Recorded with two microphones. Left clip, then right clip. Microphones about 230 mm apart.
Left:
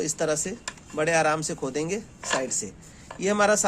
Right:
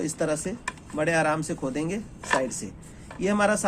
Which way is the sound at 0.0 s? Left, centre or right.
Left.